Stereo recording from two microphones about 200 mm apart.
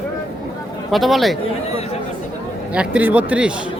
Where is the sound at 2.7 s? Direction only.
5° right (ahead or behind).